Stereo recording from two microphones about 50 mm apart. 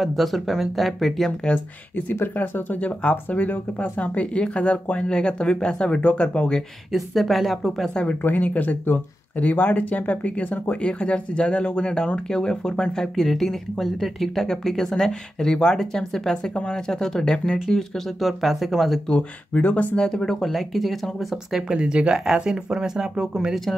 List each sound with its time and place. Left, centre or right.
0.0 s speech: centre
2.3 s speech: left; by 6.6 s centre
6.9 s speech: centre
7.9 s speech: left
8.2 s speech: left; by 18.9 s centre
19.0 s speech: left
20.0 s speech: centre
21.5 s speech: centre